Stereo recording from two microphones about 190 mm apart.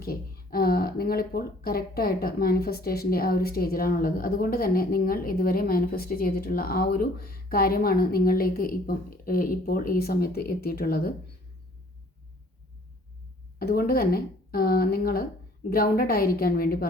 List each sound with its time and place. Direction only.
0.0 s speech: 50° left (ahead or behind)
13.6 s speech: 55° left (ahead or behind)